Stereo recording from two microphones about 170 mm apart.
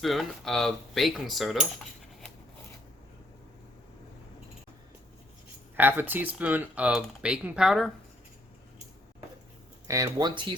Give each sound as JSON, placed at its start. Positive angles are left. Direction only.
{"t": 0.0, "sound": "speech", "side_deg": 0}
{"t": 5.7, "sound": "speech", "side_deg": -10}
{"t": 9.8, "sound": "speech", "side_deg": -20}